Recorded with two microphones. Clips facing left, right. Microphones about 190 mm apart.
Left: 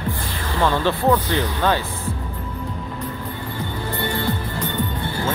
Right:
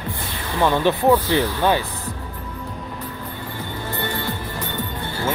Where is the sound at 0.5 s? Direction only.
15° right (ahead or behind).